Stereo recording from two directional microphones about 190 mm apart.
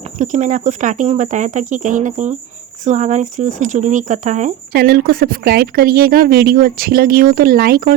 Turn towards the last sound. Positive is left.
turn(degrees=-50)  # may be behind; listen again after turning